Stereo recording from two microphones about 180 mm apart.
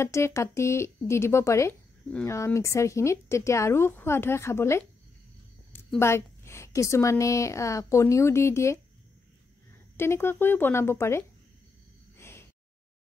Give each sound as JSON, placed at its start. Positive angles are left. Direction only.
{"t": 0.0, "sound": "a woman's voice", "side_deg": 15}
{"t": 9.9, "sound": "speech", "side_deg": 15}
{"t": 12.2, "sound": "gasp", "side_deg": 15}